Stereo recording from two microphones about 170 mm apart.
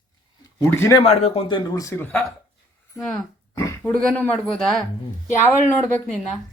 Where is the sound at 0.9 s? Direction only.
35° left (ahead or behind); by 2.2 s 15° left (ahead or behind).